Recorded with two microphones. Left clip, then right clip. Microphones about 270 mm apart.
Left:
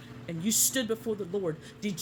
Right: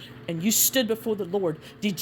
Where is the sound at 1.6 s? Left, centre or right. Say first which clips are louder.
Right 6 dB; right.